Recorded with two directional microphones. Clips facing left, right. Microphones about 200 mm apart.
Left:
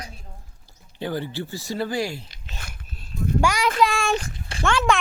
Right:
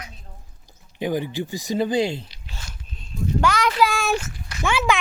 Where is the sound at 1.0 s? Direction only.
15° right (ahead or behind).